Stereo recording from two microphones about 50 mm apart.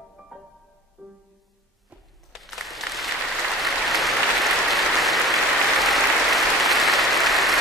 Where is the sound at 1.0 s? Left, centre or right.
Centre.